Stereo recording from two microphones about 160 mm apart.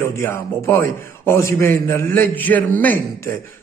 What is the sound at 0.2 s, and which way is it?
A man's voice, 15° left (ahead or behind).